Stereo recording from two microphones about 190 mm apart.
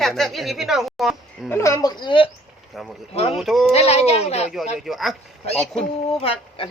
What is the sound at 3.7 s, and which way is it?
Speech, 35° left (ahead or behind).